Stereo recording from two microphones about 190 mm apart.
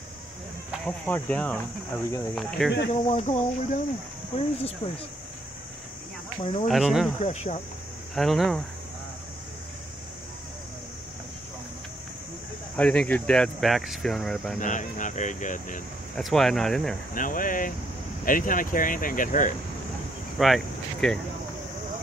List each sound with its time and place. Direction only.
0.8 s speech: 10° left (ahead or behind)
2.9 s speech: 35° left (ahead or behind)
6.7 s speech: centre (ahead or behind)
7.2 s speech: 35° left (ahead or behind)
8.1 s speech: centre (ahead or behind)
12.7 s speech: 5° left (ahead or behind)
14.6 s speech: 40° left (ahead or behind)
16.2 s speech: centre (ahead or behind)
17.1 s speech: 45° left (ahead or behind)
20.3 s cricket: centre (ahead or behind)